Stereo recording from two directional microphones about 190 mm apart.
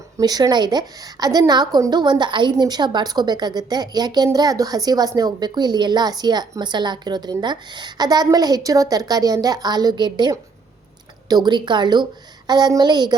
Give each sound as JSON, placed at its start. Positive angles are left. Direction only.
{"t": 0.2, "sound": "a woman's voice", "side_deg": -20}